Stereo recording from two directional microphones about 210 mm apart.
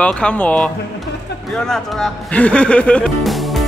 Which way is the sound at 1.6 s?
5° left (ahead or behind).